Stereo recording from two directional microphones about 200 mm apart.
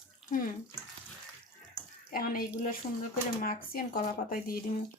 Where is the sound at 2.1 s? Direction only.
45° left (ahead or behind).